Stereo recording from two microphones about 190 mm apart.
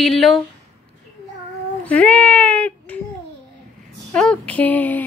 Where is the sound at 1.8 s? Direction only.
5° left (ahead or behind).